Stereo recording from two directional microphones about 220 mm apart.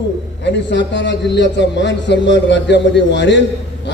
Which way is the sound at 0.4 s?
50° left (ahead or behind).